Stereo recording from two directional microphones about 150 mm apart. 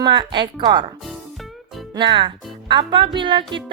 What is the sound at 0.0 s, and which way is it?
Speech, 30° right (ahead or behind).